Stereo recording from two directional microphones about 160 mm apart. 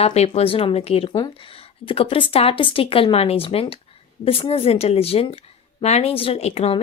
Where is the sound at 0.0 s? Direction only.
40° left (ahead or behind).